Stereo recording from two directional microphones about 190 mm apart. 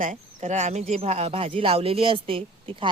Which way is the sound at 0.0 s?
40° right (ahead or behind).